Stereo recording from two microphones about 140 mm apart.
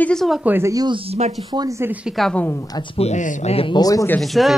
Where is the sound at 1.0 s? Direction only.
50° right (ahead or behind).